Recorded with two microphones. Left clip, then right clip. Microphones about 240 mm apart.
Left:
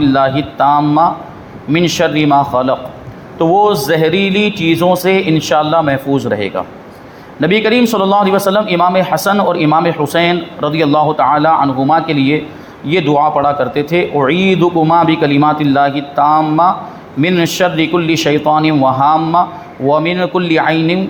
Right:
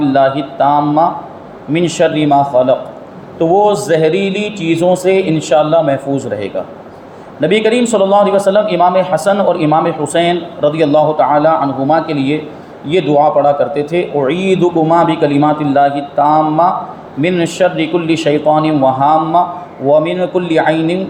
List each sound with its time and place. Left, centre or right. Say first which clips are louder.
0.0 s a man's voice: right 1 dB; left
3.8 s a man's voice: even; left